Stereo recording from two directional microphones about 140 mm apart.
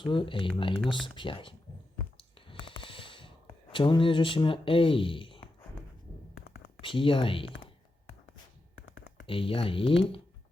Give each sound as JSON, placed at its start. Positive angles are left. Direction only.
{"t": 0.0, "sound": "speech", "side_deg": 35}
{"t": 2.1, "sound": "clicking", "side_deg": 40}
{"t": 6.8, "sound": "speech", "side_deg": 40}
{"t": 9.2, "sound": "speech", "side_deg": 40}